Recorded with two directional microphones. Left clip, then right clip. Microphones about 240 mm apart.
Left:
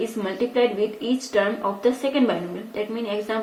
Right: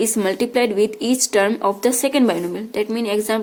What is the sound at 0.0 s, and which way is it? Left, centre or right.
A woman's voice, right.